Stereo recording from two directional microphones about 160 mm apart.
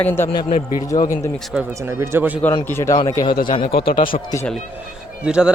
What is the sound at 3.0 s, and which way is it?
Speech, 25° left (ahead or behind).